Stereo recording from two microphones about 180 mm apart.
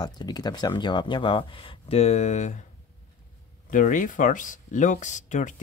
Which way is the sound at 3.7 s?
45° left (ahead or behind).